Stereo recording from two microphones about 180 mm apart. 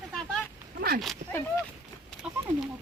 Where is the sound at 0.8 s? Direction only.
55° right (ahead or behind).